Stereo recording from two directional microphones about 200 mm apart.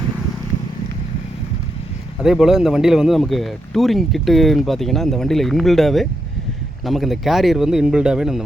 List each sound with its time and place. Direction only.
2.2 s speech: 5° right (ahead or behind)